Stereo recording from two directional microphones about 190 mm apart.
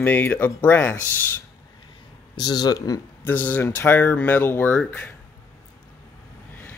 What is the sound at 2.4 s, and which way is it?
Speech, 20° left (ahead or behind).